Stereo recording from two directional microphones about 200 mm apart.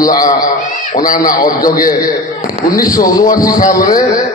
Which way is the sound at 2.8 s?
20° left (ahead or behind).